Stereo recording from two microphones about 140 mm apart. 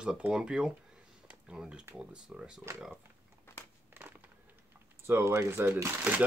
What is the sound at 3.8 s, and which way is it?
Crumpling, 15° right (ahead or behind).